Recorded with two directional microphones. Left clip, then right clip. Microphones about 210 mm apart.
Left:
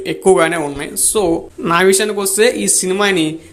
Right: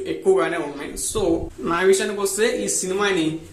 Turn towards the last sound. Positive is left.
turn(degrees=35)  # may be behind; listen again after turning